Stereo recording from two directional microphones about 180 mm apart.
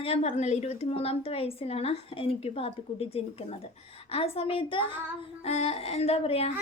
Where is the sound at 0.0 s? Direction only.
35° left (ahead or behind).